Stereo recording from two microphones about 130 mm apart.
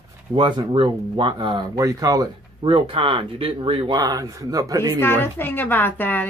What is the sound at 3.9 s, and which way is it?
Speech, 30° right (ahead or behind).